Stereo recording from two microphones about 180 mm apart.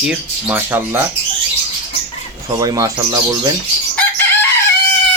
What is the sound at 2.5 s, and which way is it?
Speech, 20° right (ahead or behind).